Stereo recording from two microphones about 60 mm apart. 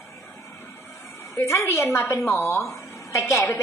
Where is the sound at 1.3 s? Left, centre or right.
Left.